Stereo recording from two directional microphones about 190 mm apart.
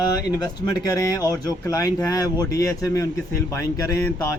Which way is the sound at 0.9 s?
20° left (ahead or behind).